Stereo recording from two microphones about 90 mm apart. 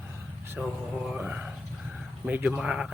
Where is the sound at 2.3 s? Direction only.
15° right (ahead or behind).